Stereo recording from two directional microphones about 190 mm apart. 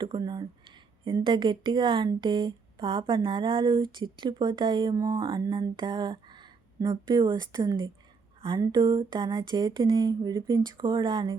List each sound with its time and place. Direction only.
0.0 s speech: 25° right (ahead or behind)